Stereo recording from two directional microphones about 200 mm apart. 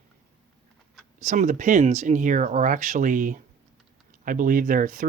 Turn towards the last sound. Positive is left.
turn(degrees=-40)  # may be behind; listen again after turning